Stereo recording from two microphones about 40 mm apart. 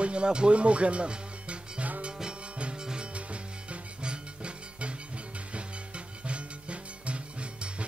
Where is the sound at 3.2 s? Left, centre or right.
Right.